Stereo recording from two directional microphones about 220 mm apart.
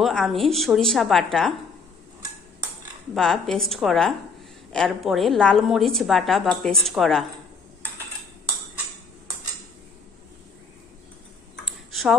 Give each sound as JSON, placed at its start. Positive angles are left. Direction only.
{"t": 0.0, "sound": "a woman's voice", "side_deg": 0}
{"t": 3.2, "sound": "a woman's voice", "side_deg": 0}
{"t": 11.6, "sound": "a sound", "side_deg": 0}